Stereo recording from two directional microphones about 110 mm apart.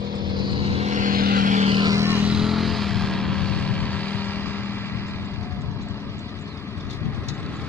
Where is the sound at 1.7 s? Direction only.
35° right (ahead or behind).